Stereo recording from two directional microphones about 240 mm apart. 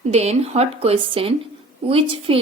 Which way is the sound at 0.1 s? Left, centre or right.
Right.